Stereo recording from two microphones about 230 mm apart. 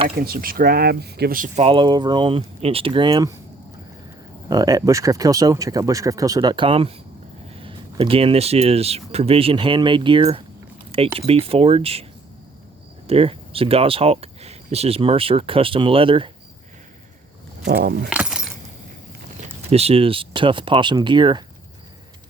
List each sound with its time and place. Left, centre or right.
0.2 s speech: right; by 3.3 s centre
4.4 s speech: centre
13.1 s speech: right
17.7 s speech: right
18.1 s keys jangling: centre
19.4 s speech: right